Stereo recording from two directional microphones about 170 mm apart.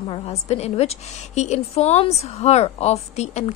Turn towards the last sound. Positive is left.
turn(degrees=40)  # may be behind; listen again after turning